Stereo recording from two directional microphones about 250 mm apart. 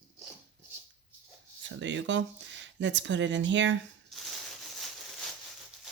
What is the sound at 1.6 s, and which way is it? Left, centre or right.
Speech, right.